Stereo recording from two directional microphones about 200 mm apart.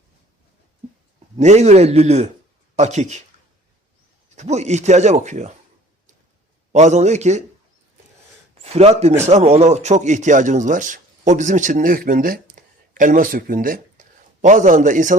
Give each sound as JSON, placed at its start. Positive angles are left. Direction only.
{"t": 1.4, "sound": "a man's voice", "side_deg": -35}
{"t": 4.4, "sound": "a man's voice", "side_deg": -35}
{"t": 6.7, "sound": "a man's voice", "side_deg": -35}
{"t": 8.6, "sound": "a man's voice", "side_deg": -30}